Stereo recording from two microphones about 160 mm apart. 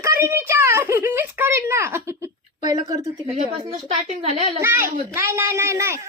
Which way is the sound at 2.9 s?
20° right (ahead or behind).